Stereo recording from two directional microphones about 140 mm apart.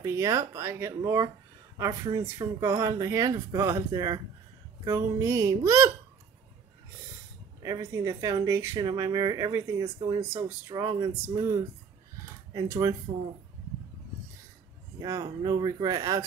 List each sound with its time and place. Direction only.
0.0 s speech: 20° right (ahead or behind)
7.6 s speech: 25° right (ahead or behind)
15.0 s speech: 25° right (ahead or behind)